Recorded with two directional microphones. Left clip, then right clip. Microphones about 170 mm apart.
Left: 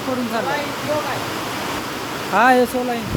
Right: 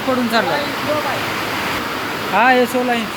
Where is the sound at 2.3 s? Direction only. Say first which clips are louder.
Right 1 dB; 40° left (ahead or behind).